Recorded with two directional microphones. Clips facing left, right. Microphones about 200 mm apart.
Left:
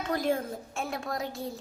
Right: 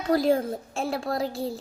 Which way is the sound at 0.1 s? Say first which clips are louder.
Right 7 dB; 35° right (ahead or behind).